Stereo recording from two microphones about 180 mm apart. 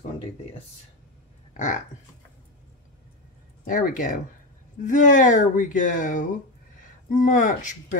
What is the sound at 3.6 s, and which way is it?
Speech, 50° left (ahead or behind).